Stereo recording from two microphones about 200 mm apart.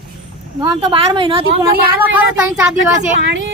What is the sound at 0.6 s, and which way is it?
Speech, 20° right (ahead or behind).